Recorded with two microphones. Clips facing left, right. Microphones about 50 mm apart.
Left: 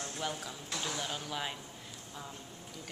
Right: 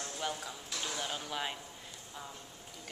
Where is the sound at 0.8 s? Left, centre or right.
Centre.